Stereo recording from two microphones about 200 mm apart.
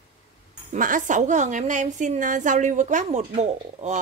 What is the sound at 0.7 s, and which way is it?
A woman's voice, 40° right (ahead or behind).